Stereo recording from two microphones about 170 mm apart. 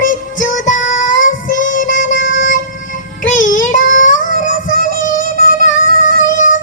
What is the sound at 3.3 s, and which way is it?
Child singing, 50° left (ahead or behind).